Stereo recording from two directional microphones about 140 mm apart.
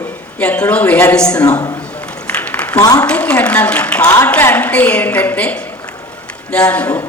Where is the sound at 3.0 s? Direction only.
10° left (ahead or behind).